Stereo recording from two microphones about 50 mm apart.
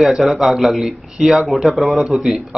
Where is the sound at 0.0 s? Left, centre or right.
Centre.